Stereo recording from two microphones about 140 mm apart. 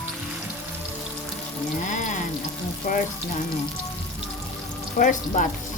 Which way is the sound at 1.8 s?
65° left (ahead or behind).